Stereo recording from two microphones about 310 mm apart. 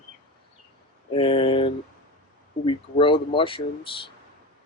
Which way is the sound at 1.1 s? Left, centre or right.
Centre.